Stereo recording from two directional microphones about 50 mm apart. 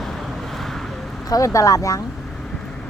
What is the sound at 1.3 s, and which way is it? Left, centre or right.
Speech, left.